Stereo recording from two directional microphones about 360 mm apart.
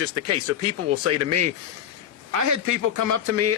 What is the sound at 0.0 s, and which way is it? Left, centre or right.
A man's voice, right.